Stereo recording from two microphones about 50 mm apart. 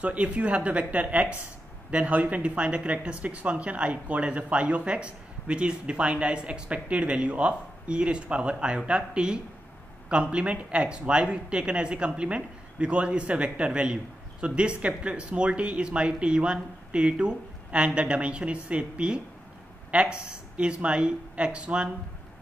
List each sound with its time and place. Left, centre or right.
0.0 s speech: right